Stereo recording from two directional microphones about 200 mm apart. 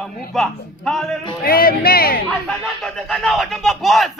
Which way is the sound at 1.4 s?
50° left (ahead or behind).